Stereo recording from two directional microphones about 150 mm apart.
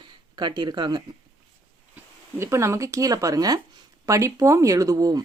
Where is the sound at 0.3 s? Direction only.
30° right (ahead or behind).